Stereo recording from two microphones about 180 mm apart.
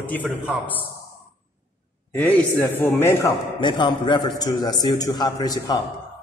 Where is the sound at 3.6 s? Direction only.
25° left (ahead or behind).